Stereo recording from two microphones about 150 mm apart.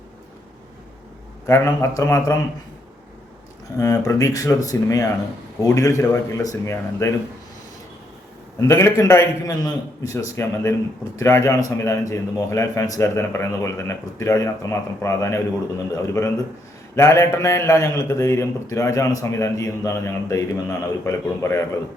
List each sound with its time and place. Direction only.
1.5 s a man's voice: 20° left (ahead or behind)
3.8 s a man's voice: 20° left (ahead or behind)
8.6 s a man's voice: 20° left (ahead or behind)